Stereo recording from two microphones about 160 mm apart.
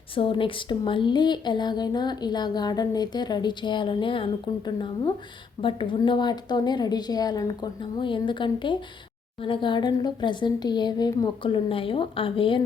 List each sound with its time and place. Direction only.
0.2 s speech: 35° left (ahead or behind)